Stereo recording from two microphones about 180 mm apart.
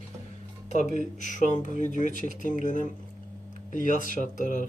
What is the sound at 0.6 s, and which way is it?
Speech, 40° left (ahead or behind).